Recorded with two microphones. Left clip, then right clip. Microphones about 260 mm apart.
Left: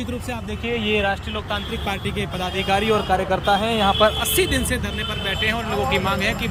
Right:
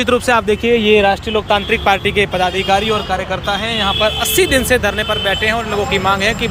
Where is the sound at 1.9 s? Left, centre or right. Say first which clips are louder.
Right 13 dB; centre; by 4.1 s left.